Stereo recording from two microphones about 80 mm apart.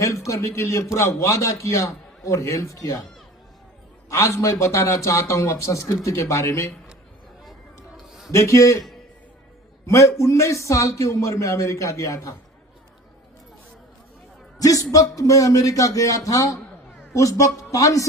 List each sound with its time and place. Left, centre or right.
0.0 s a man's voice: left
4.1 s a man's voice: left
8.0 s a sound: centre
8.3 s a man's voice: left
9.8 s a man's voice: left
14.6 s speech: left